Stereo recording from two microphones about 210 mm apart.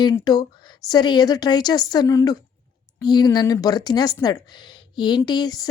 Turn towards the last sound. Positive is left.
turn(degrees=20)  # may be behind; listen again after turning